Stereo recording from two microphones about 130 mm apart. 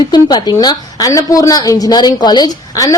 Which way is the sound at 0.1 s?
30° left (ahead or behind).